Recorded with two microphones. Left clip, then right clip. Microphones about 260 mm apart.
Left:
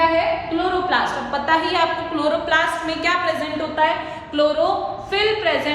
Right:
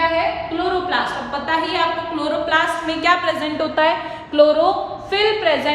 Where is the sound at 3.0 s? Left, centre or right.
Centre.